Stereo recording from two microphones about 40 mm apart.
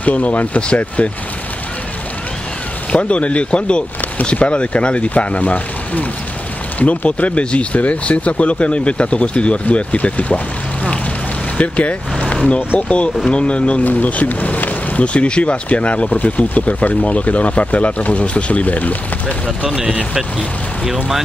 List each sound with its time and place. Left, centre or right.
0.0 s speech: left
2.9 s speech: left
11.5 s speech: left
12.2 s vehicle: left
12.8 s speech: left
13.8 s speech: left
15.1 s speech: left
20.8 s speech: centre